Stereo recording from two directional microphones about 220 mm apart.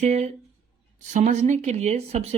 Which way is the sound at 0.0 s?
30° right (ahead or behind).